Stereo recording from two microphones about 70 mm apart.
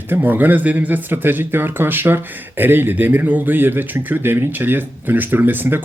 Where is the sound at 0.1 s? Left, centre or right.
Right.